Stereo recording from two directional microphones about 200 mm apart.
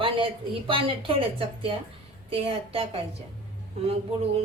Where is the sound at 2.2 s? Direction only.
30° right (ahead or behind).